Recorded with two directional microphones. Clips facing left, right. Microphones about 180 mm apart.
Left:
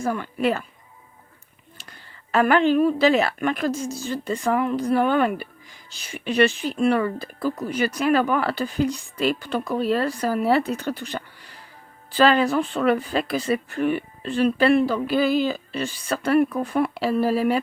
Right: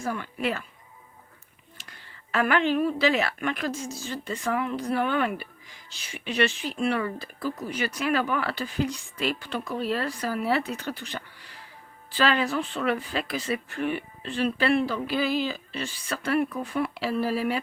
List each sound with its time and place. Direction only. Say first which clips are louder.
0.0 s speech: left 6 dB; 40° left (ahead or behind)
2.3 s speech: left 6 dB; 40° left (ahead or behind)